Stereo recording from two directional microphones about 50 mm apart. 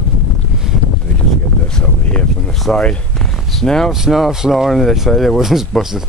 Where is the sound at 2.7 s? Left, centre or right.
Centre.